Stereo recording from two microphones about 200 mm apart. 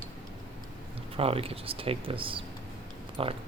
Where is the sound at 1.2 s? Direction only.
30° right (ahead or behind).